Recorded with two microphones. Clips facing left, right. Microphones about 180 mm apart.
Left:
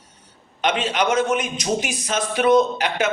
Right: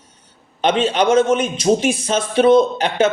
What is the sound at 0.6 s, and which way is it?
A man's voice, 30° right (ahead or behind).